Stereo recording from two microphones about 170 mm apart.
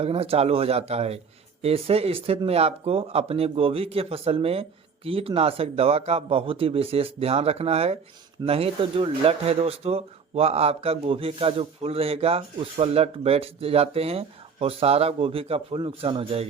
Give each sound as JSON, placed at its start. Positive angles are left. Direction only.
{"t": 0.0, "sound": "speech", "side_deg": -35}